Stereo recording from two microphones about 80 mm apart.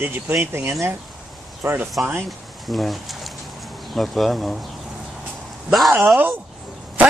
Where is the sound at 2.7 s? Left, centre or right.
Centre.